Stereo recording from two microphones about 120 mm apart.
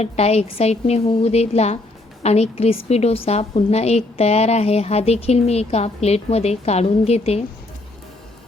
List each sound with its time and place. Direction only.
0.0 s a woman's voice: 60° left (ahead or behind)